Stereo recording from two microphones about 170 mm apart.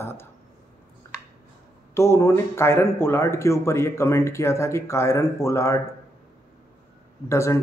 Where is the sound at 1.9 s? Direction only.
15° left (ahead or behind).